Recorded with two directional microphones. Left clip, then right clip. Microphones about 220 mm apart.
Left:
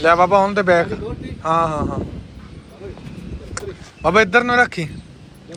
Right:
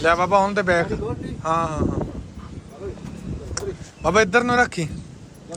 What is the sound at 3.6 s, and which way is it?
A man's voice, 15° right (ahead or behind).